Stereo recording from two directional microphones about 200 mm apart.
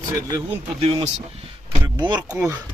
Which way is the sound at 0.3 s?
15° right (ahead or behind).